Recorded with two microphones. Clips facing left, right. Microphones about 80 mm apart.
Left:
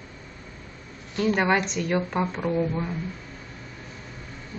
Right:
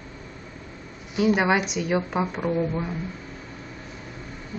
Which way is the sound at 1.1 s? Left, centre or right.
Centre.